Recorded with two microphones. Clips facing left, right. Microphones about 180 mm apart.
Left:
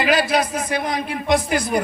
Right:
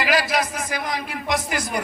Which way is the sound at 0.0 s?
25° left (ahead or behind).